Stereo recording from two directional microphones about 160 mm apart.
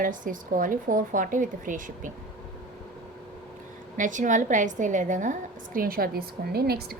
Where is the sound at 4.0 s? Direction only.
50° right (ahead or behind).